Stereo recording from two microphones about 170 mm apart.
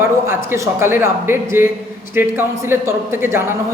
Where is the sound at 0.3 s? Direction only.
15° right (ahead or behind).